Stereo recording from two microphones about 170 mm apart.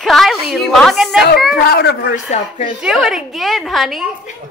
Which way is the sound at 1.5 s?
65° left (ahead or behind).